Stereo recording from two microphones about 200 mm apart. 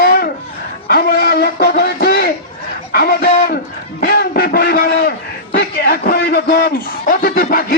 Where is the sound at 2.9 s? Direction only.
50° left (ahead or behind).